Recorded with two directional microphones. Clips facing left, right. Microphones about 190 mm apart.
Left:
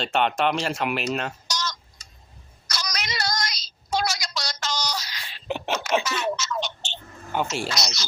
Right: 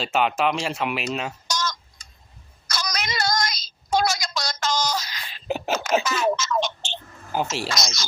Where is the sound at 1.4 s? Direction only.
50° right (ahead or behind).